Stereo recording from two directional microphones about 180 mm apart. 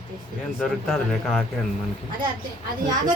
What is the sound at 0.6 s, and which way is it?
Speech, centre (ahead or behind).